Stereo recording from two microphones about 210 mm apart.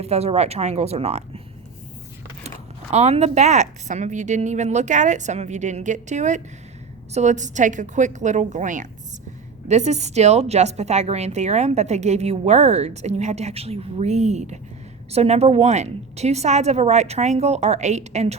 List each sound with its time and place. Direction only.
0.0 s speech: 30° right (ahead or behind)
2.9 s speech: 30° right (ahead or behind)